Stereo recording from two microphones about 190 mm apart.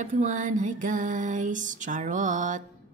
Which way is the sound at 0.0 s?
40° right (ahead or behind).